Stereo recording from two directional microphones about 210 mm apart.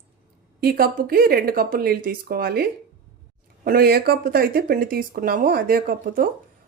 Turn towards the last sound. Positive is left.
turn(degrees=-40)  # may be behind; listen again after turning